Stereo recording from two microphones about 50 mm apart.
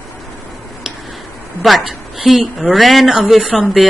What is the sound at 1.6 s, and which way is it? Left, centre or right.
Speech, centre.